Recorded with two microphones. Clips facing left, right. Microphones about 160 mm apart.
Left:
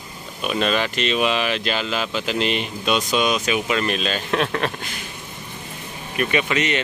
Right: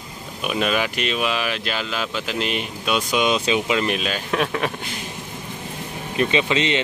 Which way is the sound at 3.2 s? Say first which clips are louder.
Right 1 dB; 20° right (ahead or behind).